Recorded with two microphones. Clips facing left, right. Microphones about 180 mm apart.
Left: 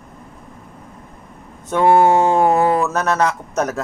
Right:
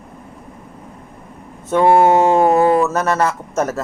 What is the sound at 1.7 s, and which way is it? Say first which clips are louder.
A man's voice: right 1 dB; 10° right (ahead or behind).